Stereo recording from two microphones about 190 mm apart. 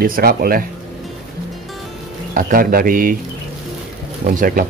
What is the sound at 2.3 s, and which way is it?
Speech, 50° right (ahead or behind).